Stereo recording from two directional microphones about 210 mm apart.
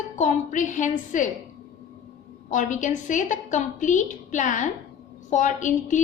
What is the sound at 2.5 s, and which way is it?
A woman's voice, 35° left (ahead or behind).